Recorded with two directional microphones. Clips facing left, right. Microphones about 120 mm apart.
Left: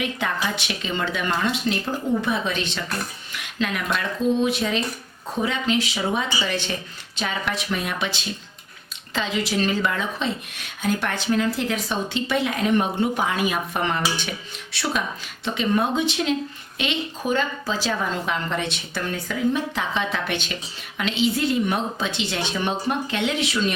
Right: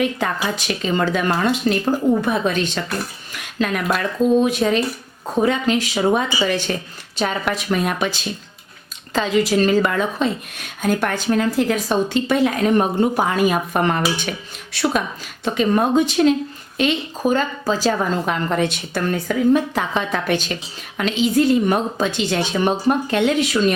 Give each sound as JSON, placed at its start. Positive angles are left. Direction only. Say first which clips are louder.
{"t": 0.4, "sound": "a woman's voice", "louder": "right 5 dB", "side_deg": -40}
{"t": 9.1, "sound": "a woman's voice", "louder": "right 7 dB", "side_deg": -45}